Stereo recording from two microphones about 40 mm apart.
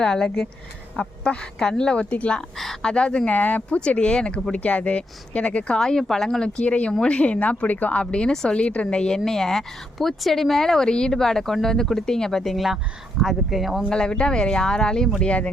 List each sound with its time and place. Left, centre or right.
0.0 s speech: centre
3.2 s speech: left
3.8 s speech: left
5.7 s a woman's voice: centre
6.6 s speech: left
7.9 s a woman's voice: left; by 12.6 s centre
13.2 s speech: centre
13.9 s speech: left